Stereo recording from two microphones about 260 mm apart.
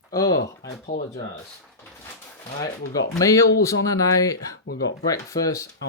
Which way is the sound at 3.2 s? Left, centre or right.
Centre.